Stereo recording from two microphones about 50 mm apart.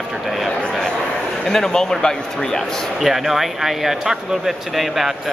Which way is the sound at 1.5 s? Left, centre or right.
Centre.